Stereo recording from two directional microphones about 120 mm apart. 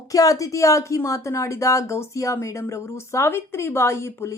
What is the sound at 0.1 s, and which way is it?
Speech, 30° left (ahead or behind).